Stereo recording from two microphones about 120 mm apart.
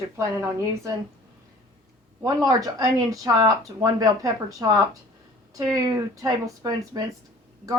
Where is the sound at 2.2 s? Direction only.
30° right (ahead or behind).